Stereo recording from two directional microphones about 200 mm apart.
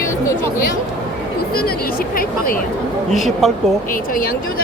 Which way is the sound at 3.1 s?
Centre (ahead or behind).